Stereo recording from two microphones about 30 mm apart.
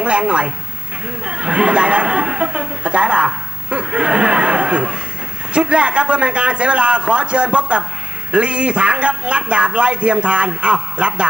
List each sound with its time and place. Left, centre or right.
0.0 s a man's voice: right